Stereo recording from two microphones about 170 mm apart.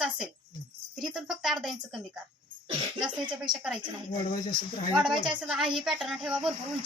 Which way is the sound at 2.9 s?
25° right (ahead or behind).